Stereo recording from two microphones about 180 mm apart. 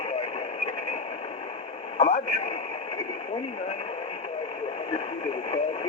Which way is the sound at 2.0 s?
35° left (ahead or behind).